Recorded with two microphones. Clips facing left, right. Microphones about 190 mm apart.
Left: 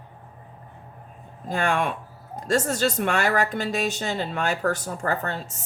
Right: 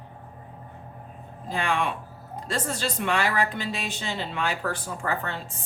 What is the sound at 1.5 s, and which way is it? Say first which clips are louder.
A woman's voice: left 3 dB; 45° left (ahead or behind).